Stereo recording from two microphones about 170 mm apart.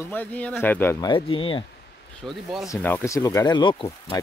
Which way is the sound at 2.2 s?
Centre (ahead or behind).